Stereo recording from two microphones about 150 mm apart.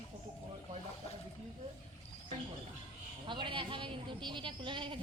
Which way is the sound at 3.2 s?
30° right (ahead or behind).